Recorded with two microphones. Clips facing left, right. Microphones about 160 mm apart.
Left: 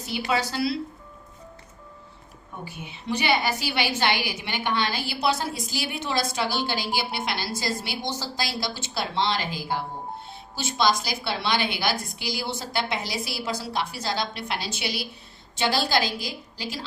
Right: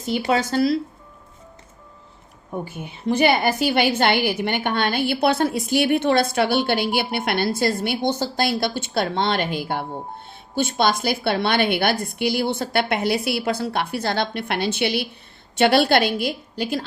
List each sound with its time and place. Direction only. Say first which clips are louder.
0.3 s speech: right 6 dB; 45° right (ahead or behind)
2.6 s a woman's voice: right 6 dB; 50° right (ahead or behind)